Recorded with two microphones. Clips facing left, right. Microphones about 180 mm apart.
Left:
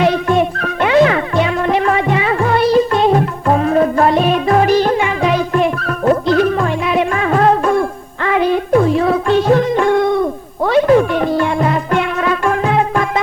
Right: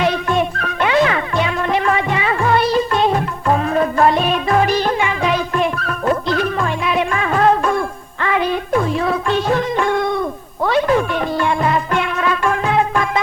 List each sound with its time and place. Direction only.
0.0 s music: 45° left (ahead or behind)